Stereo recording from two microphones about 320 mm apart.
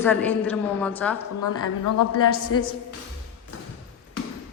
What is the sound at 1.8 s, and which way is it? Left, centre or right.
Speech, left.